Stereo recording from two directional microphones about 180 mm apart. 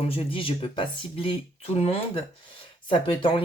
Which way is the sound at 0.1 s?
30° left (ahead or behind).